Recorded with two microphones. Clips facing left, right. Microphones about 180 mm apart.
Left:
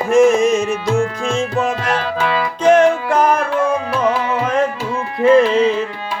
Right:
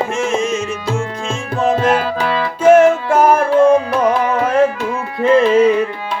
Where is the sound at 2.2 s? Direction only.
5° left (ahead or behind).